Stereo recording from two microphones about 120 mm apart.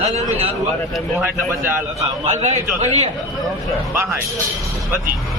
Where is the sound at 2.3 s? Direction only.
65° right (ahead or behind).